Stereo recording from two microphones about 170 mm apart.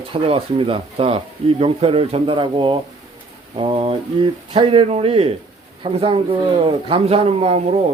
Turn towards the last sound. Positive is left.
turn(degrees=-35)  # may be behind; listen again after turning